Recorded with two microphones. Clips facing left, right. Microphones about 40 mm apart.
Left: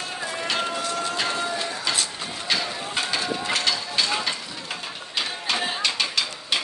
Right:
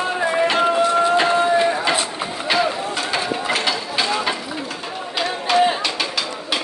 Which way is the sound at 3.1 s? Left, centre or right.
Centre.